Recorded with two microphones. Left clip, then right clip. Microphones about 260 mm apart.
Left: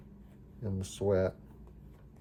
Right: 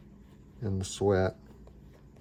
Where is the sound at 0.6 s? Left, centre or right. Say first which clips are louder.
Right 4 dB; right.